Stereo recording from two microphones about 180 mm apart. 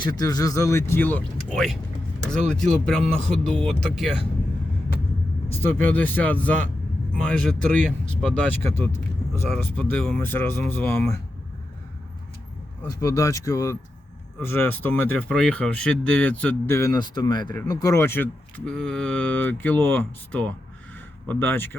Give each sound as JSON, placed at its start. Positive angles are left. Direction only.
{"t": 0.0, "sound": "speech", "side_deg": 20}
{"t": 5.6, "sound": "speech", "side_deg": 10}
{"t": 12.8, "sound": "speech", "side_deg": 20}